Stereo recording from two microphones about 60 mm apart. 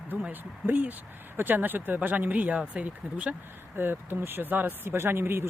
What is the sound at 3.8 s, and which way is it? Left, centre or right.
Speech, right.